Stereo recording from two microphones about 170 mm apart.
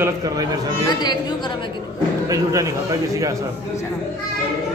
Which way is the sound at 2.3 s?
20° right (ahead or behind).